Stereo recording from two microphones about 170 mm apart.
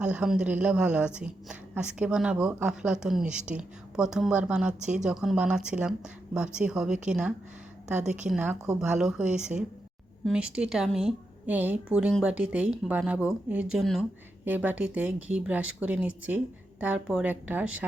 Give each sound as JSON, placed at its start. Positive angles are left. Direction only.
{"t": 0.0, "sound": "a woman's voice", "side_deg": -5}
{"t": 7.9, "sound": "a woman's voice", "side_deg": -45}
{"t": 8.3, "sound": "a woman's voice", "side_deg": -5}